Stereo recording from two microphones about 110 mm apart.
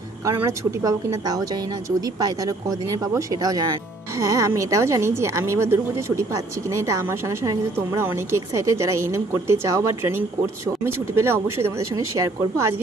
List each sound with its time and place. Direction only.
2.0 s speech: 35° right (ahead or behind)
4.2 s a woman's voice: 30° right (ahead or behind)
7.4 s a woman's voice: 25° right (ahead or behind)